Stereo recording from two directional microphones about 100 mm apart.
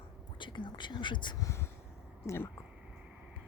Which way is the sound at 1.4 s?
25° left (ahead or behind).